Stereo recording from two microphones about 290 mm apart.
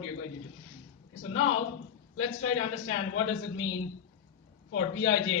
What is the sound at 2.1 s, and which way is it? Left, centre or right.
A man's voice, left.